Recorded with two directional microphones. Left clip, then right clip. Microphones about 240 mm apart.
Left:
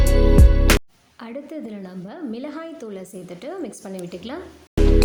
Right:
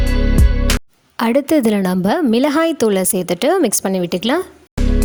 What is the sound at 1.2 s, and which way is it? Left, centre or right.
A woman's voice, right.